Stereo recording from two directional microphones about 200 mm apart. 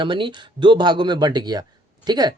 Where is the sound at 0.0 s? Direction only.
25° right (ahead or behind).